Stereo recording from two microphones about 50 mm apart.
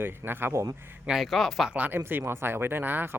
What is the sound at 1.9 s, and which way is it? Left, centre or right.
Speech, right.